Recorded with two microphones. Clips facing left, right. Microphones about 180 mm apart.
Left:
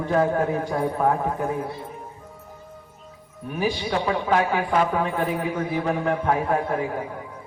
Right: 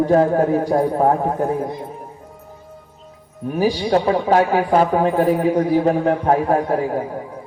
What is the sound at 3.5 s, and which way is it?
A man's voice, 35° right (ahead or behind).